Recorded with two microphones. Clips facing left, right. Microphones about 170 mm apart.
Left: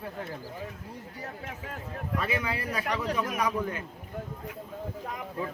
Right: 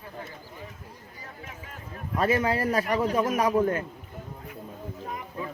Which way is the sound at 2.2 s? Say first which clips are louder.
Right 9 dB; 45° right (ahead or behind).